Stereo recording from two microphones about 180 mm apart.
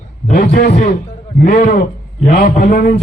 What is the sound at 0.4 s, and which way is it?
A man's voice, 35° left (ahead or behind).